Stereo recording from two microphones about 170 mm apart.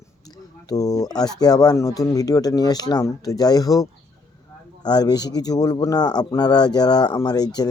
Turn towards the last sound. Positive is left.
turn(degrees=25)  # may be behind; listen again after turning